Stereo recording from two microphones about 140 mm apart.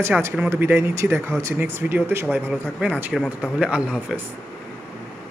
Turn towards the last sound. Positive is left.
turn(degrees=-5)  # may be behind; listen again after turning